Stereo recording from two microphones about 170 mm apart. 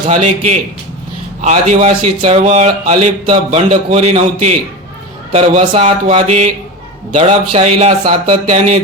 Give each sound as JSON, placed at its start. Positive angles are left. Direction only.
{"t": 1.4, "sound": "a man's voice", "side_deg": -45}